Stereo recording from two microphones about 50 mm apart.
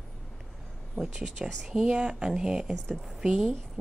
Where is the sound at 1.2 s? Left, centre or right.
Centre.